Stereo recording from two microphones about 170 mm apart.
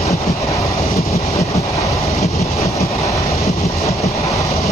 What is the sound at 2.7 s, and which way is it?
Train, 20° left (ahead or behind).